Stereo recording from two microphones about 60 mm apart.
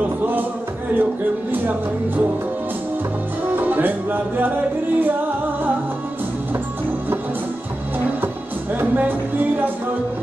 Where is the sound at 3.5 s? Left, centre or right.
Right.